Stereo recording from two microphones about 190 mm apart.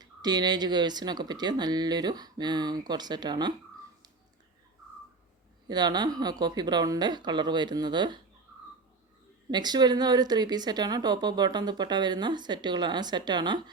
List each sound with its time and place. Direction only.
0.0 s a woman's voice: 20° right (ahead or behind)
5.6 s a woman's voice: 20° right (ahead or behind)
9.5 s a woman's voice: 20° right (ahead or behind)